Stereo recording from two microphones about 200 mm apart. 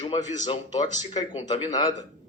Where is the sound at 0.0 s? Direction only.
30° left (ahead or behind).